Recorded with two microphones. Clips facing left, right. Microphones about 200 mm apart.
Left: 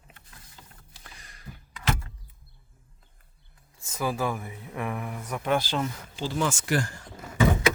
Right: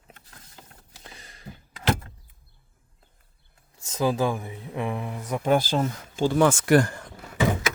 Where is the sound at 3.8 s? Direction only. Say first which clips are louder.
Right 5 dB; 20° right (ahead or behind).